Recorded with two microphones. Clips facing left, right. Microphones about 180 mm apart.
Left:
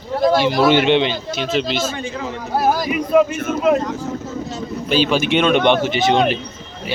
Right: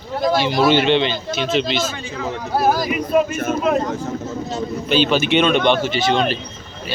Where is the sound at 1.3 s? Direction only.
Centre (ahead or behind).